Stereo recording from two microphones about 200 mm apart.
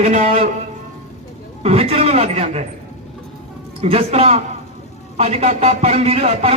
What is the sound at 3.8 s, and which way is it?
A man's voice, 30° right (ahead or behind).